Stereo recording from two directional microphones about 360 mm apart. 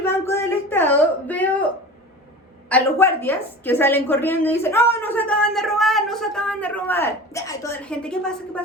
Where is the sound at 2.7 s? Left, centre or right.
Centre.